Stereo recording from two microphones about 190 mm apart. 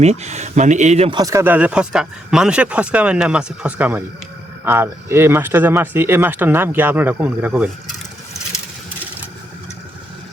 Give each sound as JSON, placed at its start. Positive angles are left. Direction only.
{"t": 0.0, "sound": "speech", "side_deg": -35}
{"t": 1.2, "sound": "speech", "side_deg": -15}